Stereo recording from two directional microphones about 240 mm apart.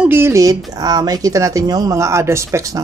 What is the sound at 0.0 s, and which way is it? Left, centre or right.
Speech, centre.